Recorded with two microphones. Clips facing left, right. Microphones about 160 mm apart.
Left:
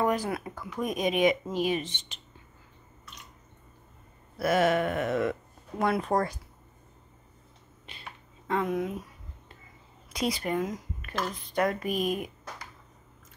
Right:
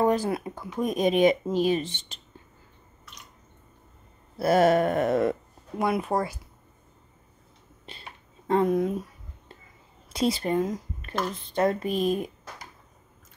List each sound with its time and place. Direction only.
0.0 s speech: 25° right (ahead or behind)
4.4 s speech: 35° right (ahead or behind)
5.8 s speech: 10° right (ahead or behind)
7.9 s finger snapping: 35° right (ahead or behind)
8.5 s speech: 35° right (ahead or behind)
10.1 s speech: 30° right (ahead or behind)